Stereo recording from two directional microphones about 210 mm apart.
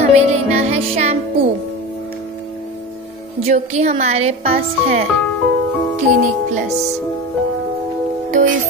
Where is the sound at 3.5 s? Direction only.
35° right (ahead or behind).